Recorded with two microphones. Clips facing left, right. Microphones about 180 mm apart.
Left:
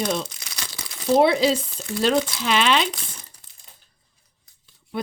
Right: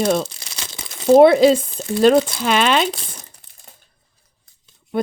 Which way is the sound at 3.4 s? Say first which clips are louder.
Right 2 dB; 60° right (ahead or behind).